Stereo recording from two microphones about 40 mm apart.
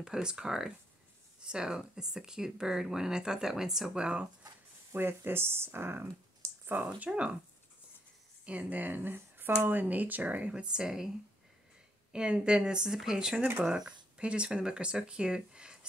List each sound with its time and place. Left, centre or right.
0.0 s speech: centre
3.9 s speech: right
4.9 s speech: right
7.1 s speech: right
8.5 s speech: right
10.5 s speech: right
12.1 s speech: right
13.8 s speech: right